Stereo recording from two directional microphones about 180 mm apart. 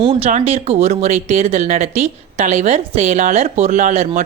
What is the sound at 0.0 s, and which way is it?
Speech, 30° right (ahead or behind).